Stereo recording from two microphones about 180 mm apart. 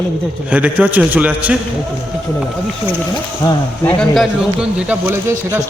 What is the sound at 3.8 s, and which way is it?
Speech, 5° left (ahead or behind).